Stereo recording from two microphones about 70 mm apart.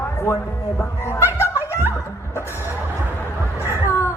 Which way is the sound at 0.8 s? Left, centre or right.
Left.